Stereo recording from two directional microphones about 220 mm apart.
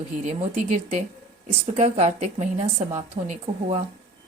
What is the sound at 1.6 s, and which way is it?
A woman's voice, 30° right (ahead or behind).